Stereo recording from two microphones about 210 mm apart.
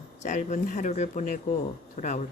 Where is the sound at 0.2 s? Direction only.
35° left (ahead or behind).